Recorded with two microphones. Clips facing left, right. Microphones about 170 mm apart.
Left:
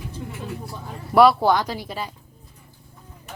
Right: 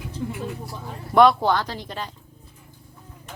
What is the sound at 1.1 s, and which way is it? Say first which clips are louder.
A woman's voice: left 1 dB; 5° left (ahead or behind).